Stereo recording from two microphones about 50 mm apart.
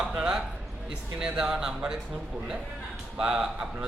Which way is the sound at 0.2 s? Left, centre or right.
Centre.